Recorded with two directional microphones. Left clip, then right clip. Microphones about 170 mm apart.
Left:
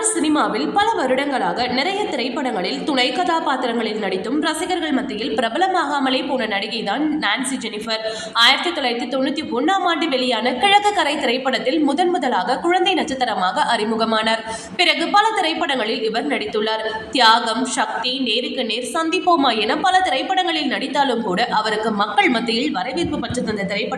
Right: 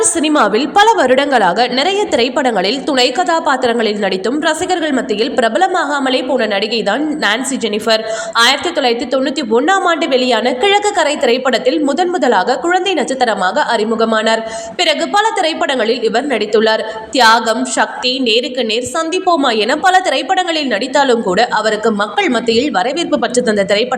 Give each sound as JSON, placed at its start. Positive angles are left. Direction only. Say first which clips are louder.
{"t": 0.2, "sound": "a woman's voice", "louder": "right 6 dB", "side_deg": -40}
{"t": 5.4, "sound": "a woman's voice", "louder": "right 5 dB", "side_deg": -30}
{"t": 8.4, "sound": "a woman's voice", "louder": "right 3 dB", "side_deg": -35}
{"t": 19.2, "sound": "a woman's voice", "louder": "right 4 dB", "side_deg": -25}